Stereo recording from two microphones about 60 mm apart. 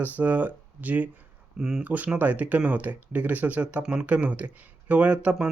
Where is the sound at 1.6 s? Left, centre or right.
Centre.